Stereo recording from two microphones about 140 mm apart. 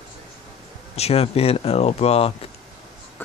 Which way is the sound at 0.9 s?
45° left (ahead or behind).